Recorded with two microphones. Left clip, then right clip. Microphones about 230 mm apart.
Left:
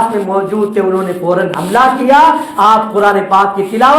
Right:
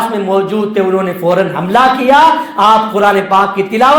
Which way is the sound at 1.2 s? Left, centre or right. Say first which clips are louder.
Right 2 dB; right.